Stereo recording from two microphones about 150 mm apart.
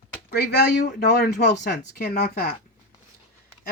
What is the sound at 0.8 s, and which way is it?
Speech, 90° left.